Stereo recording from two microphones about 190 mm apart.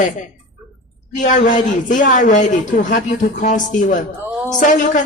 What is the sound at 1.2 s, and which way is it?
A woman's voice, 40° left (ahead or behind).